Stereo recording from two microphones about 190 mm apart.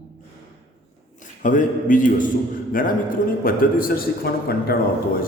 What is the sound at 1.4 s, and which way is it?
A man's voice, 45° left (ahead or behind).